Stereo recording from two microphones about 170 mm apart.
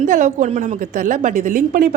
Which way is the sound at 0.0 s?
45° right (ahead or behind).